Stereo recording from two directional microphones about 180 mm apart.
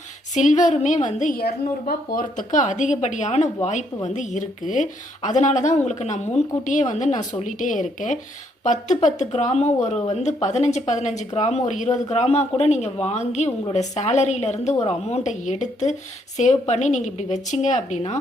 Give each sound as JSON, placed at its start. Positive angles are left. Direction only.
{"t": 0.3, "sound": "speech", "side_deg": 40}